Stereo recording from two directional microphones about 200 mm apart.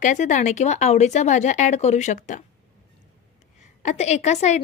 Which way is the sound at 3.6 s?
35° left (ahead or behind).